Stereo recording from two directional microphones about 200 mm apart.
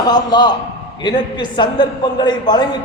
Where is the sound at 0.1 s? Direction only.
20° left (ahead or behind).